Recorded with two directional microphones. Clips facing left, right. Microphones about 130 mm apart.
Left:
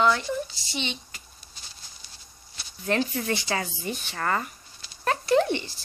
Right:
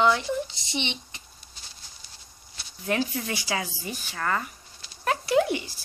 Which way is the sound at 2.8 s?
10° right (ahead or behind).